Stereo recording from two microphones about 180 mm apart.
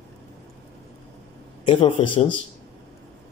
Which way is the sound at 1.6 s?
30° left (ahead or behind).